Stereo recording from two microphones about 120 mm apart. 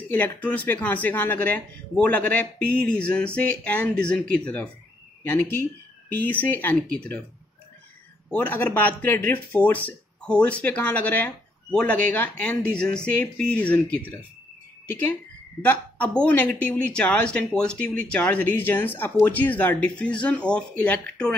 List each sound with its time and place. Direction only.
0.1 s speech: 15° left (ahead or behind)
8.3 s speech: 15° left (ahead or behind)